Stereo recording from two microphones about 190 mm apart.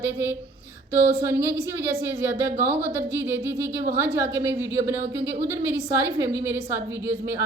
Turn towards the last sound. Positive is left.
turn(degrees=-15)  # may be behind; listen again after turning